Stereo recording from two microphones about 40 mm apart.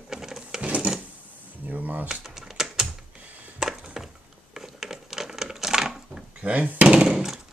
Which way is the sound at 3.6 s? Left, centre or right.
Centre.